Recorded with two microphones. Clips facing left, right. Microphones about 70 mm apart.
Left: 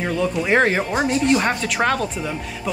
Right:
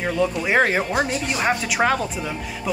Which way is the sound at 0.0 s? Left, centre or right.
Centre.